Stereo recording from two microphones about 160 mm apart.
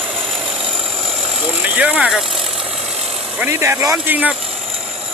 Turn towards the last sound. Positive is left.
turn(degrees=-10)  # may be behind; listen again after turning